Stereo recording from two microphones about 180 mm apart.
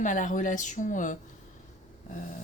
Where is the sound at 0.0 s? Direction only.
45° left (ahead or behind).